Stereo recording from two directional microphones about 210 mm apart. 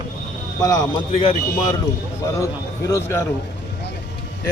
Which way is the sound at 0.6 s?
15° left (ahead or behind).